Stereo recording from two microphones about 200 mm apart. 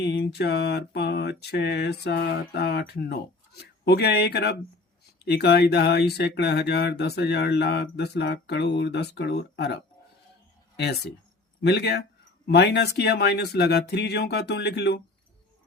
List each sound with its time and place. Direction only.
0.0 s speech: 55° left (ahead or behind)
10.8 s speech: 55° left (ahead or behind)